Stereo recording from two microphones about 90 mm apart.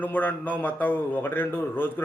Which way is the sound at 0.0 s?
15° left (ahead or behind).